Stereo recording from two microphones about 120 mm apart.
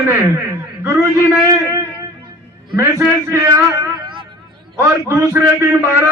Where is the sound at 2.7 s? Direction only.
25° right (ahead or behind).